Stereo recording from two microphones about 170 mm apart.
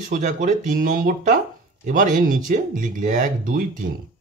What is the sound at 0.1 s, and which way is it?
Speech, 50° right (ahead or behind).